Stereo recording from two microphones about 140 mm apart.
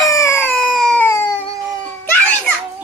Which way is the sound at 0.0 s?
20° left (ahead or behind).